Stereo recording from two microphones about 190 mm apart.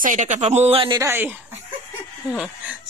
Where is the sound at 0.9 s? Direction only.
10° right (ahead or behind).